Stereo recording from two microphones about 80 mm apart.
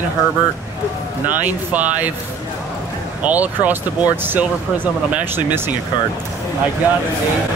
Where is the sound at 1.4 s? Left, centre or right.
Right.